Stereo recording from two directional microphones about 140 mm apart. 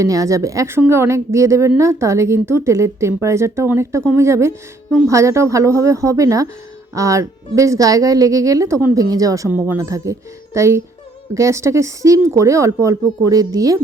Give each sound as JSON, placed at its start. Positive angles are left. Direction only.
{"t": 0.0, "sound": "a woman's voice", "side_deg": -25}
{"t": 9.5, "sound": "a woman's voice", "side_deg": -15}